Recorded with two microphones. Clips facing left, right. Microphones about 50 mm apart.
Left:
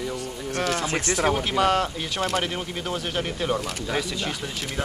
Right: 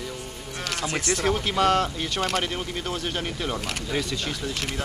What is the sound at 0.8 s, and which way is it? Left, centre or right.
Speech, left.